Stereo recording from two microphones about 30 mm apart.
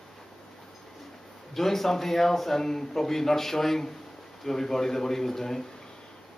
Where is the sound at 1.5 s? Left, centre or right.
Centre.